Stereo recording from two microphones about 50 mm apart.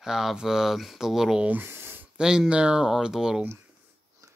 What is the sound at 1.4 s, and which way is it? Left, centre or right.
Speech, right.